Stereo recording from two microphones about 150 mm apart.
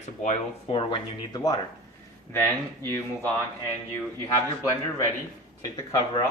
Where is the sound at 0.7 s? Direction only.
35° left (ahead or behind).